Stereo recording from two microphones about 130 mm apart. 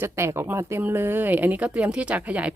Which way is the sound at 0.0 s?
20° right (ahead or behind).